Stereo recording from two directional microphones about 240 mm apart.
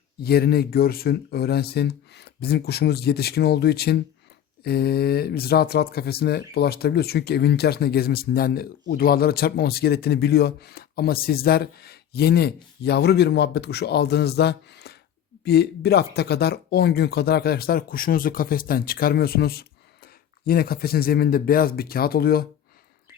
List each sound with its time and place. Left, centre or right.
0.2 s a man's voice: left